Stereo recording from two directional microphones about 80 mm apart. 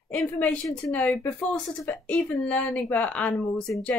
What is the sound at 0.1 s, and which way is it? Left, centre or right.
Speech, centre.